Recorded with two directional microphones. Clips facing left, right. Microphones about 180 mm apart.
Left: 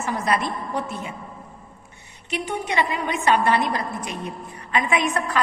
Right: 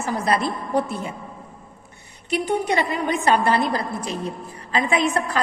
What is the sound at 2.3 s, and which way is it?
A woman's voice, 35° right (ahead or behind).